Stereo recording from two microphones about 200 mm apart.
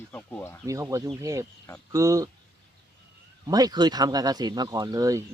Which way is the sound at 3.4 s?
20° right (ahead or behind).